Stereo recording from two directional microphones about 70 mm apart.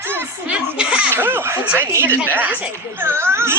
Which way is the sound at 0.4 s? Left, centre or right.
Centre.